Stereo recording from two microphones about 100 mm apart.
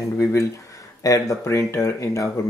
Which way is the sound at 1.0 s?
35° left (ahead or behind).